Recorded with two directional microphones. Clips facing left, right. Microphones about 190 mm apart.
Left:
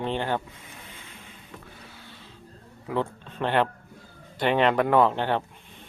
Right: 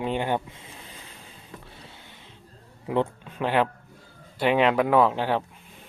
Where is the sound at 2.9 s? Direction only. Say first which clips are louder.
Right 3 dB; 20° right (ahead or behind).